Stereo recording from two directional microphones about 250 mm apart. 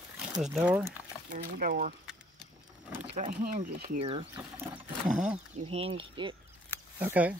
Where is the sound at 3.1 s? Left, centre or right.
Right.